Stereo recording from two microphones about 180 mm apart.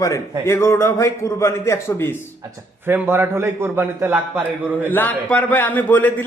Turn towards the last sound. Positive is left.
turn(degrees=10)  # may be behind; listen again after turning